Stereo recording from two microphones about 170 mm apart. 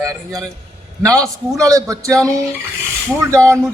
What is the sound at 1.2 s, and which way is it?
Speech, 20° right (ahead or behind).